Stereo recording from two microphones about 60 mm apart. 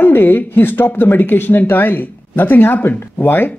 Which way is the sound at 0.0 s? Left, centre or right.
Left.